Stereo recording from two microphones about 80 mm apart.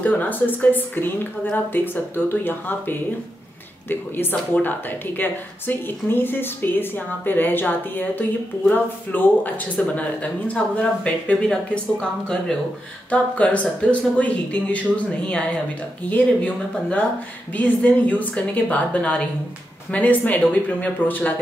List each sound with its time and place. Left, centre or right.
0.0 s a woman's voice: left